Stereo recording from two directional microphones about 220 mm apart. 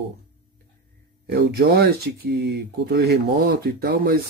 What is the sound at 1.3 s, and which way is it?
Speech, 45° right (ahead or behind).